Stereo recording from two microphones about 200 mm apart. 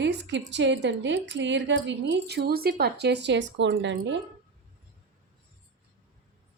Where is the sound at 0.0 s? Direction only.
60° right (ahead or behind).